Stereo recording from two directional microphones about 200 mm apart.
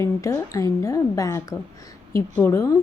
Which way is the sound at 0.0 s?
15° left (ahead or behind).